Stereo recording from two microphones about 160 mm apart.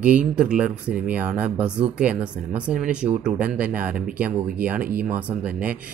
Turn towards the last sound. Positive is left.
turn(degrees=-10)  # may be behind; listen again after turning